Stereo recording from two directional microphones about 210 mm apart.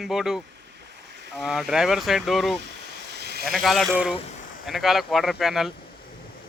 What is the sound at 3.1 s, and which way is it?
Sheep, 50° right (ahead or behind).